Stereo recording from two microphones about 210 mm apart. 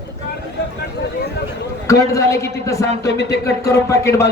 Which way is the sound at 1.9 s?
15° left (ahead or behind).